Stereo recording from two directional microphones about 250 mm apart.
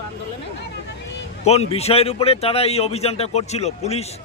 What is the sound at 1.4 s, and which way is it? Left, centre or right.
A man's voice, left.